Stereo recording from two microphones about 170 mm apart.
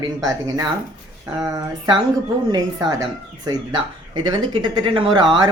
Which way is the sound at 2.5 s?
25° right (ahead or behind).